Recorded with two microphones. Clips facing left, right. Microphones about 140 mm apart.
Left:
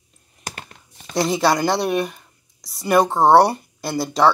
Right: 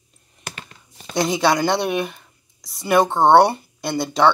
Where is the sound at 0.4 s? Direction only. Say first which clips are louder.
Left 2 dB; 40° left (ahead or behind).